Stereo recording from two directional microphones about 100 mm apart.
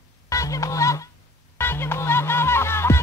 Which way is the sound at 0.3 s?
30° left (ahead or behind).